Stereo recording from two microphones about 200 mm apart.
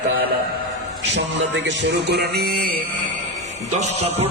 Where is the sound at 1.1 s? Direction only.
65° right (ahead or behind).